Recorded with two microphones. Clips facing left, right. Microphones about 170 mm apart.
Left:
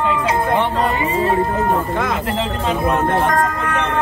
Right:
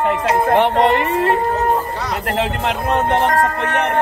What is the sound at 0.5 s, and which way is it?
Speech, 70° right (ahead or behind).